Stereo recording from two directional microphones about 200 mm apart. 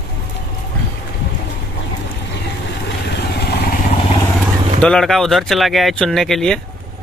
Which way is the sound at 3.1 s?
55° left (ahead or behind).